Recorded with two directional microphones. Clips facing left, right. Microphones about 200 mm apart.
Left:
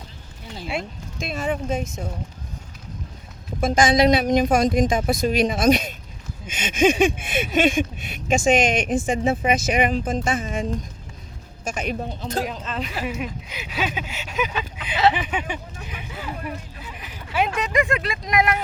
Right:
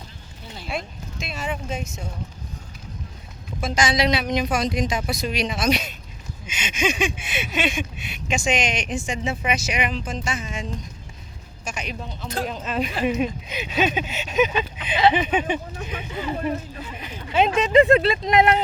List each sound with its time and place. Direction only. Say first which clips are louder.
1.2 s speech: left 5 dB; 50° left (ahead or behind)
3.6 s speech: left 5 dB; 50° left (ahead or behind)
12.6 s a woman's voice: right 5 dB; 15° right (ahead or behind)